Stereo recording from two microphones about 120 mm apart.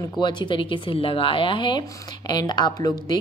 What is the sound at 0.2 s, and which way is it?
A woman's voice, 40° left (ahead or behind).